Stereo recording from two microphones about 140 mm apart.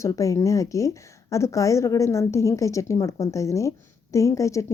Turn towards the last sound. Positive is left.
turn(degrees=20)  # may be behind; listen again after turning